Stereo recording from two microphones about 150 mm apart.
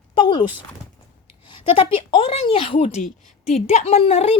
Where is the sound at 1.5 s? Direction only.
40° left (ahead or behind).